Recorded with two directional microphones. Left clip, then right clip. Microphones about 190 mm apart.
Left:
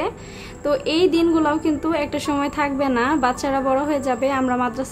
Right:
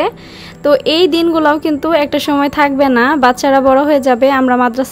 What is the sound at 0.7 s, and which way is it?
A woman's voice, 40° right (ahead or behind).